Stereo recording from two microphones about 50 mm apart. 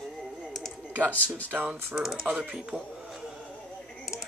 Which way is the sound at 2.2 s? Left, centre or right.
Right.